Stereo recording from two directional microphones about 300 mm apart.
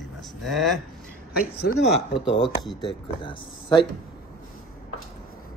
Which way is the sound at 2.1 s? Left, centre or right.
Centre.